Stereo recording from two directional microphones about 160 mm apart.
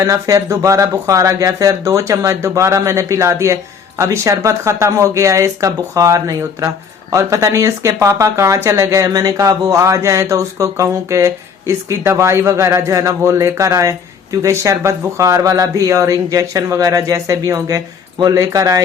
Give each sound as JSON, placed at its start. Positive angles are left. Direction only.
{"t": 0.0, "sound": "speech", "side_deg": -20}